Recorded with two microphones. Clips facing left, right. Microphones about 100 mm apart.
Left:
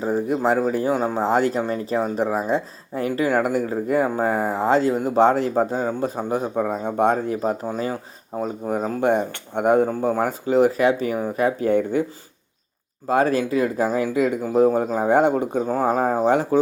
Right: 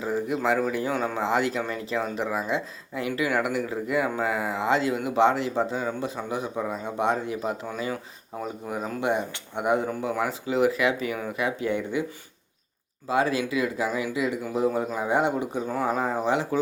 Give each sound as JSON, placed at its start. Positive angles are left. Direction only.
{"t": 0.0, "sound": "speech", "side_deg": 40}
{"t": 13.1, "sound": "speech", "side_deg": 45}